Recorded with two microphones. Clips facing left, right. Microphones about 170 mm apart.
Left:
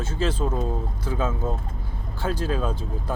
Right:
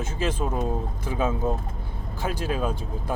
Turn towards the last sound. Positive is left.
turn(degrees=-10)  # may be behind; listen again after turning